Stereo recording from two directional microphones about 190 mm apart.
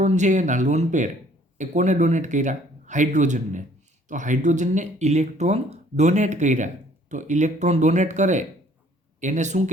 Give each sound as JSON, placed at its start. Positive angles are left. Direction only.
{"t": 0.0, "sound": "speech", "side_deg": -40}